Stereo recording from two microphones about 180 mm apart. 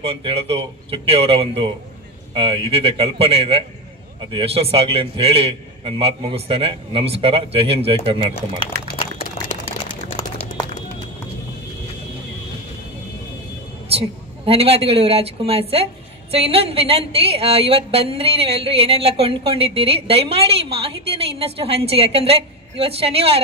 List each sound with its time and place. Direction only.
0.0 s a woman's voice: 30° right (ahead or behind)
13.9 s a woman's voice: 30° right (ahead or behind)